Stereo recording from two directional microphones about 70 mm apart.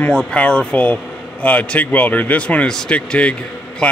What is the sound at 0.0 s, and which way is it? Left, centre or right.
Speech, centre.